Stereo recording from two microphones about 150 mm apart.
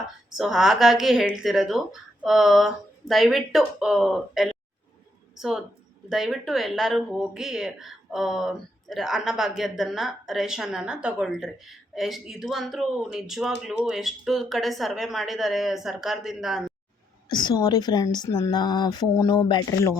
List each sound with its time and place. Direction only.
0.3 s a woman's voice: centre (ahead or behind)
17.2 s a woman's voice: 30° left (ahead or behind)